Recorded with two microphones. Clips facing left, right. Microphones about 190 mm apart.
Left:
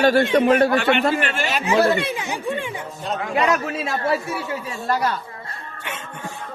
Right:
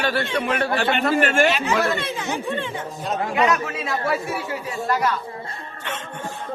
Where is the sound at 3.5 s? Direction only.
25° left (ahead or behind).